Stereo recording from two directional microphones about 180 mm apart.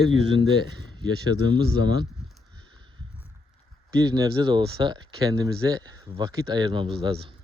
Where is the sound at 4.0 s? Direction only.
20° right (ahead or behind).